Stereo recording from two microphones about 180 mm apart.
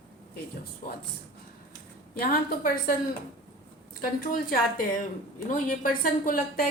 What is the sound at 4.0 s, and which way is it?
Speech, 50° left (ahead or behind).